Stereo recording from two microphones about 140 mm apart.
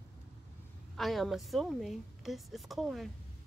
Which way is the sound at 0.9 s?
Centre (ahead or behind).